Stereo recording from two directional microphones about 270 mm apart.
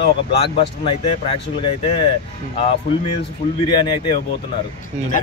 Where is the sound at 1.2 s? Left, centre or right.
Centre.